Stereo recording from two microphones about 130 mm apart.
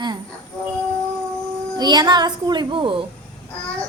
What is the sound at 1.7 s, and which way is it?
A woman's voice, 35° right (ahead or behind).